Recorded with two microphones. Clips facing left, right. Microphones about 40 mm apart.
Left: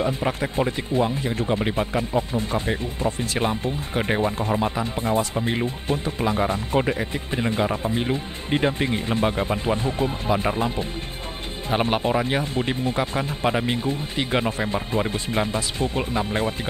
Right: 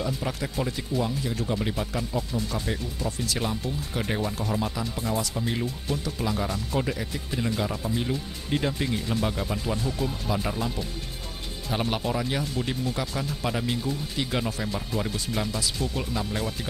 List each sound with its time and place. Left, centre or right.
0.0 s speech: left